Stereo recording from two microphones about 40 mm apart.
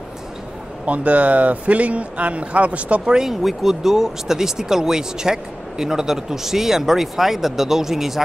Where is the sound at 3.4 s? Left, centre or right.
Centre.